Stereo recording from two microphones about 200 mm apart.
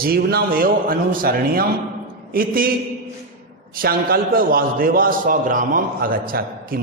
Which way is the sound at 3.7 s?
45° right (ahead or behind).